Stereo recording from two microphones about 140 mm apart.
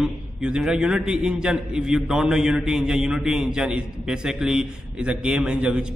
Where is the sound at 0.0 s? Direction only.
5° right (ahead or behind).